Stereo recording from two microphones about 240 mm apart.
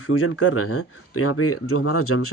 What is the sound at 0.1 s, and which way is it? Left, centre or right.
Speech, left.